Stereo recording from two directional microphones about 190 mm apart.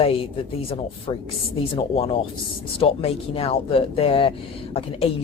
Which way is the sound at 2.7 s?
30° left (ahead or behind).